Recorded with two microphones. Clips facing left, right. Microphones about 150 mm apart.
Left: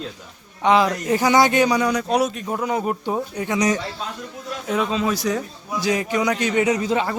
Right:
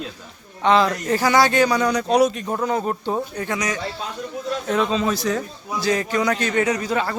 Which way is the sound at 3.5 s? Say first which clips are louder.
Left 8 dB; 35° left (ahead or behind).